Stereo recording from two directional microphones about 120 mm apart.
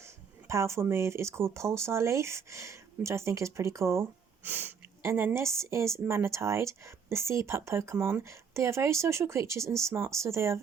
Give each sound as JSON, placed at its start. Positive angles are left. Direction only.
{"t": 0.0, "sound": "a woman's voice", "side_deg": -25}